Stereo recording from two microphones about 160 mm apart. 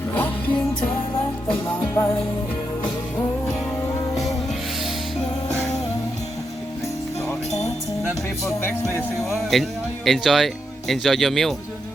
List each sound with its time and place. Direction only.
0.1 s music: 10° left (ahead or behind)
9.3 s speech: centre (ahead or behind)